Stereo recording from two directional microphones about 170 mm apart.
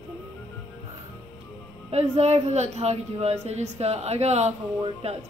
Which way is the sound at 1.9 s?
40° right (ahead or behind).